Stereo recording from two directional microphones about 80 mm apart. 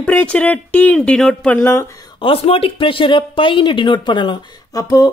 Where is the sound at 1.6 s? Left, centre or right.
Left.